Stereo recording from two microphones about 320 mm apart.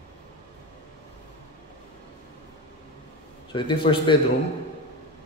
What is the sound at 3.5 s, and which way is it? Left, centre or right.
Speech, centre.